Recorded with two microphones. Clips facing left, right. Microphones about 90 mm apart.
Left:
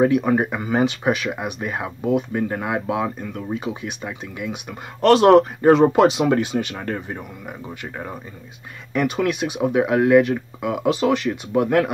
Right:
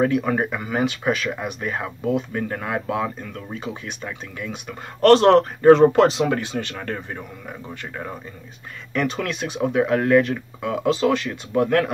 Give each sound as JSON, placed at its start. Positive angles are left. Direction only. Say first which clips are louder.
{"t": 0.0, "sound": "speech", "louder": "left 3 dB", "side_deg": 20}